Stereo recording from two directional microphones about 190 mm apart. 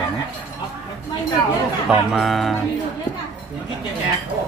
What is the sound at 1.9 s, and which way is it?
Speech, centre (ahead or behind).